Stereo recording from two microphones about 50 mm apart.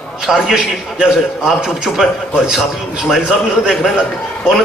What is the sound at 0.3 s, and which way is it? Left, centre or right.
Speech, centre.